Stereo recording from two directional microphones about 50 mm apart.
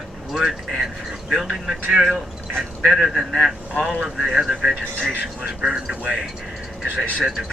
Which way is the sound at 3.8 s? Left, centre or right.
Centre.